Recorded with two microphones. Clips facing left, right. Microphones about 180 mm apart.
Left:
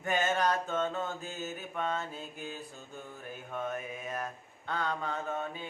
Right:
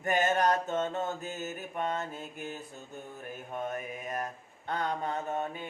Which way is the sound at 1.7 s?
15° right (ahead or behind).